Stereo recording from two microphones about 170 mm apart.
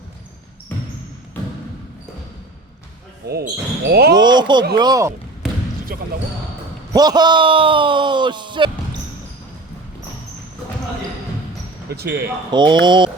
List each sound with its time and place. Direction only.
3.2 s speech: 70° right (ahead or behind)
4.2 s speech: 25° right (ahead or behind)
6.9 s speech: 25° right (ahead or behind)
11.9 s speech: 70° right (ahead or behind)
12.5 s speech: 25° right (ahead or behind)